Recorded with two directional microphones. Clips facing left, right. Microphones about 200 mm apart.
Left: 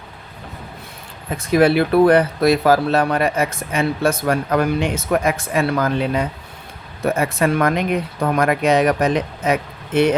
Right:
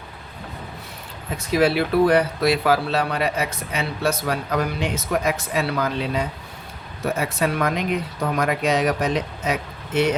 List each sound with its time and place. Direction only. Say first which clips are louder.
1.5 s speech: left 5 dB; 55° left (ahead or behind)